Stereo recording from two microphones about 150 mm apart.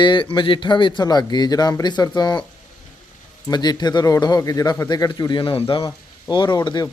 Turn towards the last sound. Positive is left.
turn(degrees=25)  # may be behind; listen again after turning